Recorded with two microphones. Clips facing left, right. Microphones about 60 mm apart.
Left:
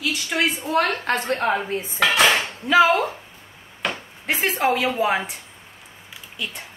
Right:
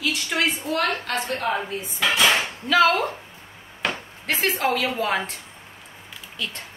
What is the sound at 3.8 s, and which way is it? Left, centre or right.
Chop, centre.